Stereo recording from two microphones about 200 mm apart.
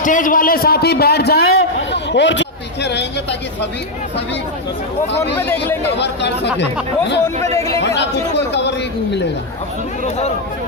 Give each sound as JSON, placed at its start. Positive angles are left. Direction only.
{"t": 0.0, "sound": "a man's voice", "side_deg": 40}
{"t": 5.6, "sound": "speech", "side_deg": 10}
{"t": 6.0, "sound": "speech", "side_deg": 60}
{"t": 7.3, "sound": "speech", "side_deg": -35}
{"t": 10.0, "sound": "speech", "side_deg": 35}